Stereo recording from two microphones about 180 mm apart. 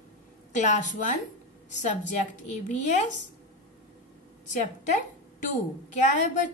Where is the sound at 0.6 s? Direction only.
40° left (ahead or behind).